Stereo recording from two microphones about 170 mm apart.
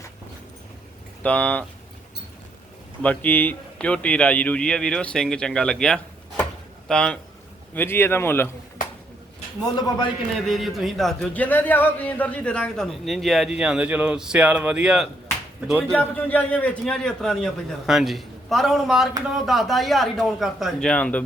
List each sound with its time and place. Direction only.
1.2 s speech: 5° left (ahead or behind)
3.0 s speech: 10° left (ahead or behind)
9.7 s a man's voice: 25° left (ahead or behind)
10.3 s speech: centre (ahead or behind)
16.2 s speech: 10° left (ahead or behind)